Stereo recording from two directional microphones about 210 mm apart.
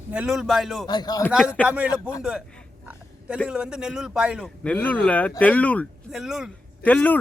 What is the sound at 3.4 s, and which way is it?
Speech, 5° right (ahead or behind).